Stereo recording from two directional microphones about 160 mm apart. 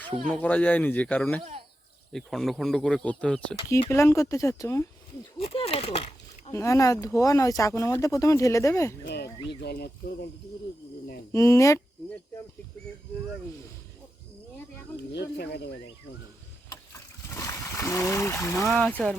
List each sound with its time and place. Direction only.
0.3 s speech: 10° left (ahead or behind)
3.7 s speech: 20° left (ahead or behind)
5.4 s a sound: 40° left (ahead or behind)
6.5 s speech: 20° left (ahead or behind)
9.0 s a sound: 90° left
9.6 s speech: 90° left
11.3 s speech: 20° left (ahead or behind)
15.1 s speech: 90° left
16.9 s a sound: 20° left (ahead or behind)
18.7 s speech: 5° left (ahead or behind)